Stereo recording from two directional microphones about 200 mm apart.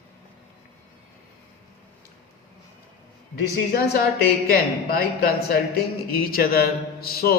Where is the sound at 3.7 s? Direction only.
50° left (ahead or behind).